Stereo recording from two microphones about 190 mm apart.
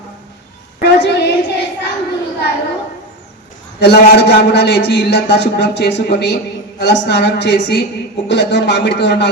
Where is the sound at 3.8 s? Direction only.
60° left (ahead or behind).